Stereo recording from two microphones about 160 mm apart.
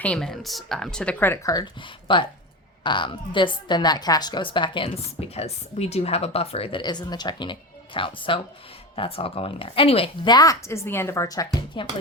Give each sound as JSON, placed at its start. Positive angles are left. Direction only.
{"t": 0.0, "sound": "a woman's voice", "side_deg": 5}